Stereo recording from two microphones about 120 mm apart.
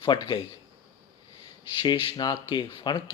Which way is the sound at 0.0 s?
40° left (ahead or behind).